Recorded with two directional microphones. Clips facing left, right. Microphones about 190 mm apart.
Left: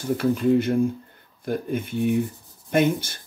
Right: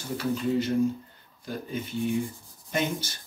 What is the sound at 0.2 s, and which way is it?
Speech, 55° left (ahead or behind).